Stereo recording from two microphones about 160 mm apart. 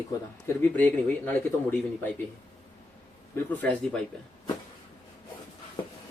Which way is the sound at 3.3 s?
10° left (ahead or behind).